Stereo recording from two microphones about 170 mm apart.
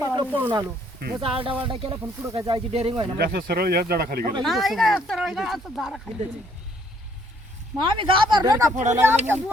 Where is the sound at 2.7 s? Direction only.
35° right (ahead or behind).